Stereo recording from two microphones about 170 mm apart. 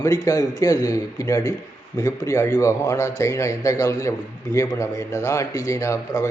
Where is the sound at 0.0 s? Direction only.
20° left (ahead or behind).